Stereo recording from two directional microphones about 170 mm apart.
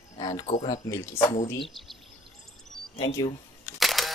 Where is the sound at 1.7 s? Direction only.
Centre (ahead or behind).